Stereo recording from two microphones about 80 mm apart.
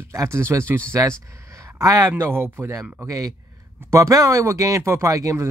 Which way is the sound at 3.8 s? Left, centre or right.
Right.